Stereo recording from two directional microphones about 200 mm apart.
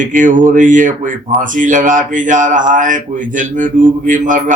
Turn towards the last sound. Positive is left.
turn(degrees=-40)  # may be behind; listen again after turning